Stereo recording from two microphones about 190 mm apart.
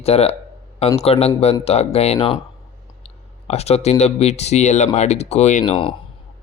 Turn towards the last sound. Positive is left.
turn(degrees=40)  # may be behind; listen again after turning